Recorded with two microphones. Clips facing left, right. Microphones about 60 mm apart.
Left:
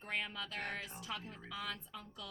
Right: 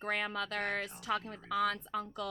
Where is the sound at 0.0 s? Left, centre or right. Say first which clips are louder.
Right 6 dB; right.